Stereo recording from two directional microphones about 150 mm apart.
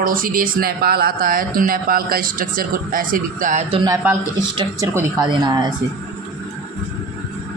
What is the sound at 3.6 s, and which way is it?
A man's voice, 35° right (ahead or behind).